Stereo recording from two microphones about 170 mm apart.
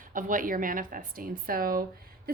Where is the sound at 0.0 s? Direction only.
50° right (ahead or behind).